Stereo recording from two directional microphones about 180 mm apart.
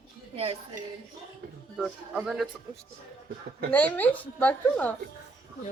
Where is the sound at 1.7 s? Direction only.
5° right (ahead or behind).